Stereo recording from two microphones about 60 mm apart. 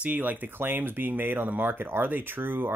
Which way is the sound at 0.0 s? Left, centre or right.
Right.